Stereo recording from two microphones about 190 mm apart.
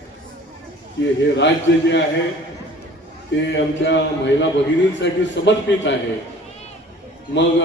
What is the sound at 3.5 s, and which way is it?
A man's voice, 70° left (ahead or behind).